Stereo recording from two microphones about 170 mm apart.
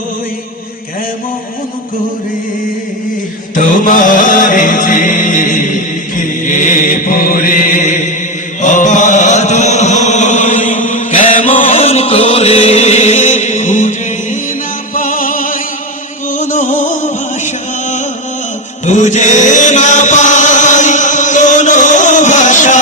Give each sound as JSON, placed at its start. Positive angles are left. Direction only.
{"t": 3.5, "sound": "music", "side_deg": 50}
{"t": 8.6, "sound": "chant", "side_deg": 45}
{"t": 11.8, "sound": "chant", "side_deg": 35}
{"t": 14.9, "sound": "music", "side_deg": 55}
{"t": 18.9, "sound": "chant", "side_deg": 45}